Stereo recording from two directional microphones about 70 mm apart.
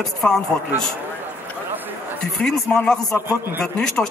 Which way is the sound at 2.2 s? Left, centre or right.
Centre.